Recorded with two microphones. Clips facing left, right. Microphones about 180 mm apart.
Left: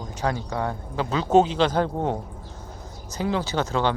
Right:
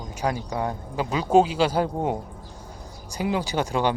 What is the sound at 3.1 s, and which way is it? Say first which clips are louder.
Speech: even; 15° right (ahead or behind).